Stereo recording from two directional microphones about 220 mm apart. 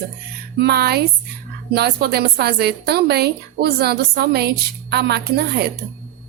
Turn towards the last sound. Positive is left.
turn(degrees=-50)  # may be behind; listen again after turning